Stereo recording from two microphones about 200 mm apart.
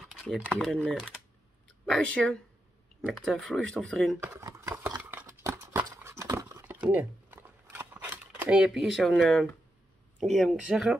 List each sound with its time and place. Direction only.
0.0 s speech: centre (ahead or behind)
4.2 s a sound: 15° right (ahead or behind); by 9.5 s 5° left (ahead or behind)
10.2 s speech: centre (ahead or behind)